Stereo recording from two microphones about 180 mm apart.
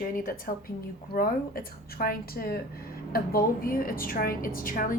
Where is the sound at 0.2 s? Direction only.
50° left (ahead or behind).